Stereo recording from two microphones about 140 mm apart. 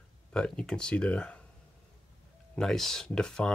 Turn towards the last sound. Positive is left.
turn(degrees=5)  # may be behind; listen again after turning